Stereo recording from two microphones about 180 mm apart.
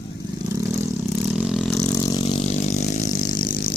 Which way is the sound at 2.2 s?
35° left (ahead or behind).